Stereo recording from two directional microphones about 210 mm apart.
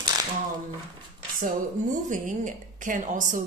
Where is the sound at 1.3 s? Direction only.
40° right (ahead or behind).